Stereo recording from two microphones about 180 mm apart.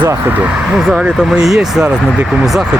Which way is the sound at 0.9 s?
5° right (ahead or behind).